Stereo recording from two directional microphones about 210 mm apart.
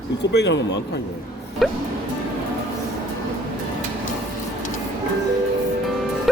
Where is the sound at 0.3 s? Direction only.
55° left (ahead or behind).